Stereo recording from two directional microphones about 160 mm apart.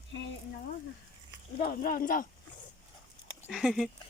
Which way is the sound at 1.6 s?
65° left (ahead or behind).